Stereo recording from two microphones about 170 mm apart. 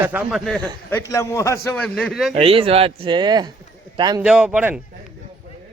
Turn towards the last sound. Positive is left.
turn(degrees=-10)  # may be behind; listen again after turning